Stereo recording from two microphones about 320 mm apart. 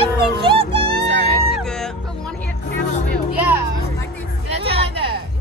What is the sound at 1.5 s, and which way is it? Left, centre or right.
Music, centre.